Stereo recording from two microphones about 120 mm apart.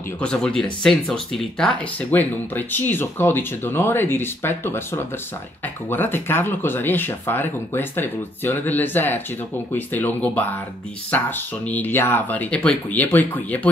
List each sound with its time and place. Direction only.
0.2 s speech: 10° left (ahead or behind)